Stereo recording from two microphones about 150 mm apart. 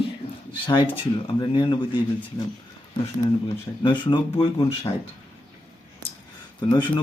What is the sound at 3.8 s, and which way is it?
Speech, 30° left (ahead or behind).